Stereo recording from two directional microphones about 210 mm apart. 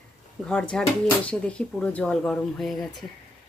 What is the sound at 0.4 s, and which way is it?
Speech, 5° left (ahead or behind).